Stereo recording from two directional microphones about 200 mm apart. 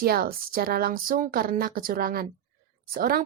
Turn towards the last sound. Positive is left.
turn(degrees=-45)  # may be behind; listen again after turning